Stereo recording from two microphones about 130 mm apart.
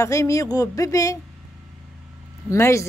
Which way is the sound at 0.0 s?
25° left (ahead or behind).